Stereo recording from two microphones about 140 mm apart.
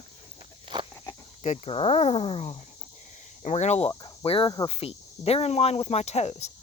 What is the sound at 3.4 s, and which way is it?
Speech, 55° left (ahead or behind).